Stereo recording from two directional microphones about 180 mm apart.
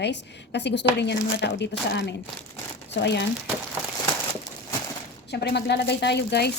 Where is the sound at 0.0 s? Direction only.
70° left (ahead or behind).